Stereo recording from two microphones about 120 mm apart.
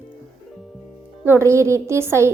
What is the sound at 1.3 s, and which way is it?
A woman's voice, 25° right (ahead or behind).